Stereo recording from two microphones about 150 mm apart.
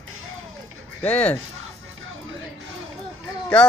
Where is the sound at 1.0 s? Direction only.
10° left (ahead or behind).